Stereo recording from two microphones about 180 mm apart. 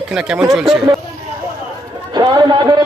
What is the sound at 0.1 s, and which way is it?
Speech, 5° right (ahead or behind).